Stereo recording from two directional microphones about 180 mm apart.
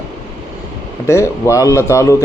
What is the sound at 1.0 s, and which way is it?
Speech, 15° left (ahead or behind).